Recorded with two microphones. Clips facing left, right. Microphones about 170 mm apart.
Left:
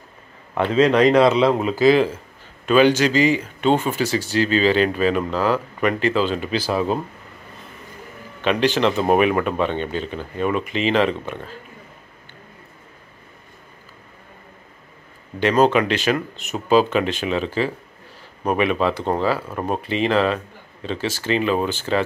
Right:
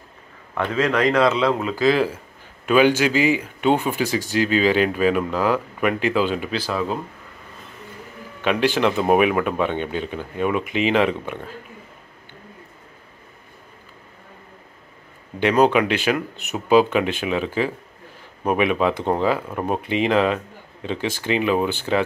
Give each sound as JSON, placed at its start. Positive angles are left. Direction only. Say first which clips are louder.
{"t": 0.6, "sound": "speech", "louder": "left 5 dB", "side_deg": 25}
{"t": 2.6, "sound": "speech", "louder": "left 1 dB", "side_deg": -10}
{"t": 6.7, "sound": "speech", "louder": "left 4 dB", "side_deg": 20}
{"t": 8.5, "sound": "speech", "louder": "left 1 dB", "side_deg": -10}
{"t": 15.3, "sound": "speech", "louder": "even", "side_deg": -15}